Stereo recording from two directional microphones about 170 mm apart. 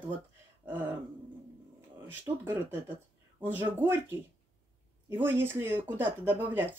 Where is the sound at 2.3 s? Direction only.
25° right (ahead or behind).